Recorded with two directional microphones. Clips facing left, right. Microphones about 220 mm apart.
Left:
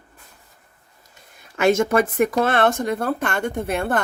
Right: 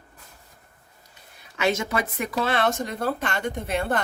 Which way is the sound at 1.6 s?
50° left (ahead or behind).